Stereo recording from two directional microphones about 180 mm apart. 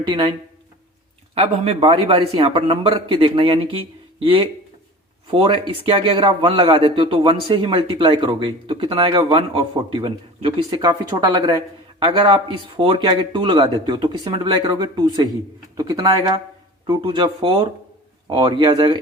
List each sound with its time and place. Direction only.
0.1 s speech: 25° right (ahead or behind)
1.4 s speech: 35° right (ahead or behind)